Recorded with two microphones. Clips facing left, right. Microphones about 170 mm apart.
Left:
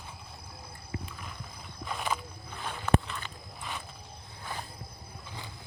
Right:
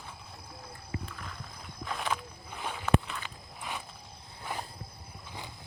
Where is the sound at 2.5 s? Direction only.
5° right (ahead or behind).